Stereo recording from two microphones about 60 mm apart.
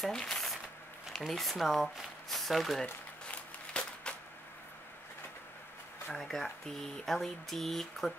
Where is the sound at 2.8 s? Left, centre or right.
Centre.